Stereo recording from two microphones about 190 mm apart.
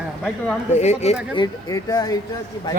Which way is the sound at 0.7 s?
35° left (ahead or behind).